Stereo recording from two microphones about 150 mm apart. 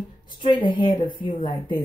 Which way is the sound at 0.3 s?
35° left (ahead or behind).